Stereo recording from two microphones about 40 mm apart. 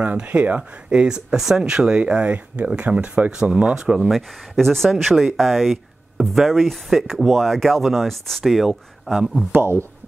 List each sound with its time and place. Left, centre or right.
0.0 s speech: right
0.9 s speech: right
3.3 s speech: right
4.1 s speech: centre
8.5 s speech: centre